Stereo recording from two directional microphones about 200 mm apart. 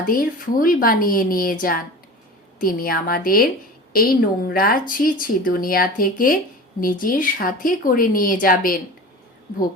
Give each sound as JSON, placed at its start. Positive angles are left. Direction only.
{"t": 0.0, "sound": "a woman's voice", "side_deg": 45}